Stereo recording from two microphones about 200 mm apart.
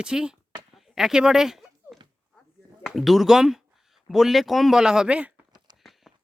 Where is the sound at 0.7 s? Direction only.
Centre (ahead or behind).